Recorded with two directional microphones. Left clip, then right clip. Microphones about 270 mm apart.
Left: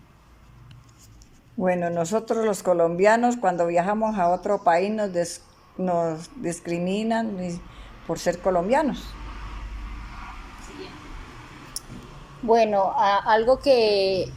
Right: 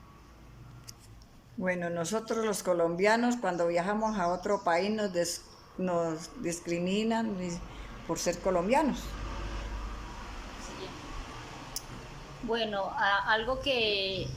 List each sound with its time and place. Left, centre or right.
1.6 s speech: centre
11.8 s a sound: centre
12.5 s a woman's voice: centre